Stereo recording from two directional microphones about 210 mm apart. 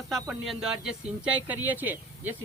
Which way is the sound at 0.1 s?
Centre (ahead or behind).